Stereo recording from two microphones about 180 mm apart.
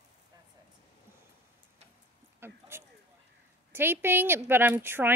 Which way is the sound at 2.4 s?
15° right (ahead or behind).